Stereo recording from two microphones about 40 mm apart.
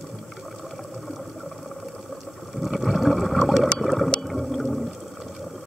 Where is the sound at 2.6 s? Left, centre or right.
Centre.